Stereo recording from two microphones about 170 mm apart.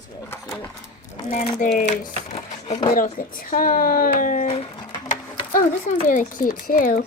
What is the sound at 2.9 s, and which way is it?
Speech, 55° left (ahead or behind).